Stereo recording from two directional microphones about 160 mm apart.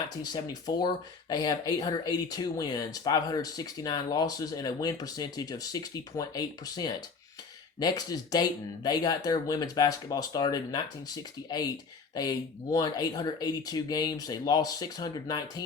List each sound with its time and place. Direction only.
0.2 s speech: 25° left (ahead or behind)